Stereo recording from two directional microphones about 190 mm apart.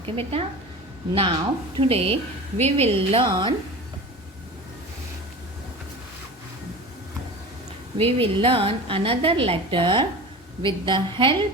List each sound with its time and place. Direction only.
0.0 s a woman's voice: 30° right (ahead or behind)
7.9 s a woman's voice: 30° right (ahead or behind)